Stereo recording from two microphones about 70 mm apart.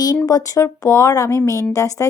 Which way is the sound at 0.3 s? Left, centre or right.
Left.